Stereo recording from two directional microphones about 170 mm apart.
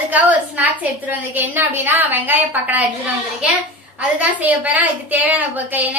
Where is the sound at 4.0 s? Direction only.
10° right (ahead or behind).